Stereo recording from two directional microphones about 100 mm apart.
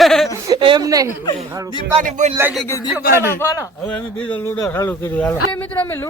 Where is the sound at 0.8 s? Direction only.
35° right (ahead or behind).